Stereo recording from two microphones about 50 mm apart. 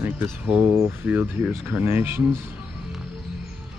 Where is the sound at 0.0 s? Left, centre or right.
Right.